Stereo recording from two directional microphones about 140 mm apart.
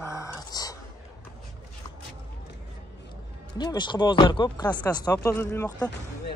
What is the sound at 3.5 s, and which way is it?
Speech, 30° left (ahead or behind).